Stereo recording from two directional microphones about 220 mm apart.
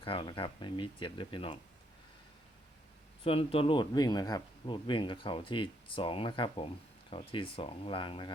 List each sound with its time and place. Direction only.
0.0 s speech: 25° left (ahead or behind)
3.2 s speech: 25° left (ahead or behind)